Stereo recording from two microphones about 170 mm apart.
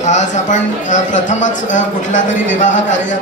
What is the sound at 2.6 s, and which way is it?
Music, 90° left.